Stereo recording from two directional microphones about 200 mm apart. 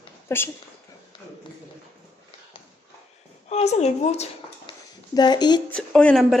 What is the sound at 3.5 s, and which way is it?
Speech, 35° left (ahead or behind).